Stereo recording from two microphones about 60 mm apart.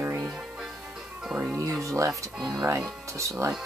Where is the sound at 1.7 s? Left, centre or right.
Right.